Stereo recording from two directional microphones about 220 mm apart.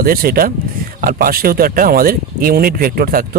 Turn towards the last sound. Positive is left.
turn(degrees=-40)  # may be behind; listen again after turning